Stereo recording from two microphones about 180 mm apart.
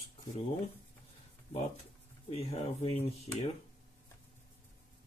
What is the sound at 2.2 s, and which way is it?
Speech, 35° left (ahead or behind).